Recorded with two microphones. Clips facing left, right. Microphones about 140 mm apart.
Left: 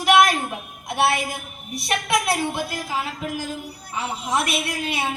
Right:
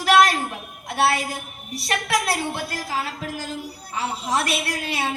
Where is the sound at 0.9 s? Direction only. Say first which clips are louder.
Even; 15° left (ahead or behind).